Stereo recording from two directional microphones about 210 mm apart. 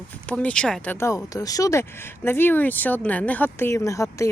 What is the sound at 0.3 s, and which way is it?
Speech, 5° left (ahead or behind).